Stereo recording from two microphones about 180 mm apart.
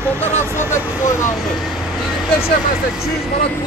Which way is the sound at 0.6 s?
15° left (ahead or behind).